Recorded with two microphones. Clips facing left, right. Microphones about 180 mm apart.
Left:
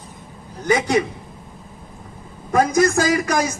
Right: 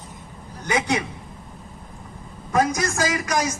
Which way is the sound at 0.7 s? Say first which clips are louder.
Left 5 dB; 35° left (ahead or behind).